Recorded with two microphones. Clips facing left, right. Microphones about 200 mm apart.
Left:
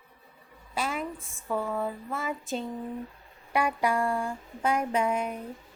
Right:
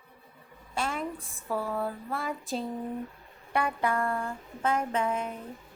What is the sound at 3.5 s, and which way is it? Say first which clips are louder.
Speech: left 2 dB; 10° left (ahead or behind).